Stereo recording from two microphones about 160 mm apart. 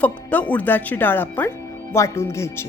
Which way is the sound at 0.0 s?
10° left (ahead or behind).